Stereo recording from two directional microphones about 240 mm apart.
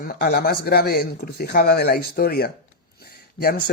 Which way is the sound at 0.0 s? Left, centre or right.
Left.